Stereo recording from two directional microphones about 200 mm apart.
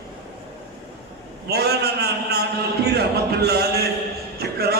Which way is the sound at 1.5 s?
55° right (ahead or behind).